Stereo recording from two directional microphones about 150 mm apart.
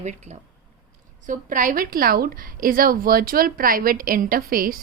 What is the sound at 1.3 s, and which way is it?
A woman's voice, 60° right (ahead or behind).